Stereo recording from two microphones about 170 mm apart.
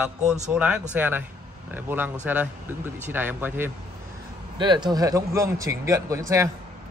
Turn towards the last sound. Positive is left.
turn(degrees=-20)  # may be behind; listen again after turning